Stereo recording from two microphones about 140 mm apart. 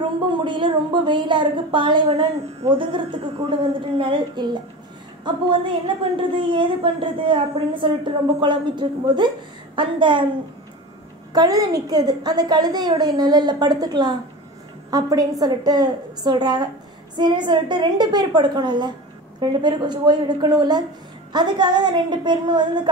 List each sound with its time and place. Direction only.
0.4 s a woman's voice: 35° right (ahead or behind)
11.3 s a woman's voice: 25° right (ahead or behind)